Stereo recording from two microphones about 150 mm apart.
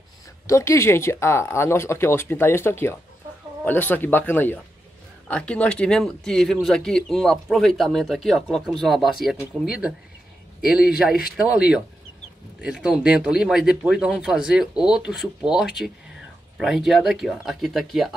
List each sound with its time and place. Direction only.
0.5 s a man's voice: 20° left (ahead or behind); by 18.1 s centre (ahead or behind)